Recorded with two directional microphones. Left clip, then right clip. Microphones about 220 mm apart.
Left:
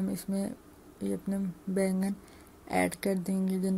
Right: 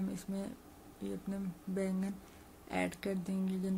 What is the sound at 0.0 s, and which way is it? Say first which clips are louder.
Speech: left 7 dB; 15° left (ahead or behind).